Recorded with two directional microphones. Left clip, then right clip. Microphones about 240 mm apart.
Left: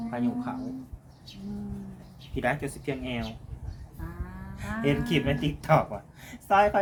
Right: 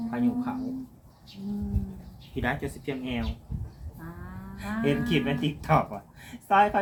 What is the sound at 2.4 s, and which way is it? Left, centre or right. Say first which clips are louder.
Speech: left 2 dB; left.